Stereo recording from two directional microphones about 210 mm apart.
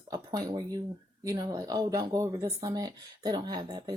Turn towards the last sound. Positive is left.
turn(degrees=-20)  # may be behind; listen again after turning